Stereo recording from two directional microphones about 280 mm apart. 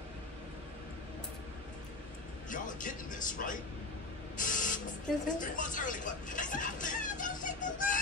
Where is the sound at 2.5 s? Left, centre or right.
Left.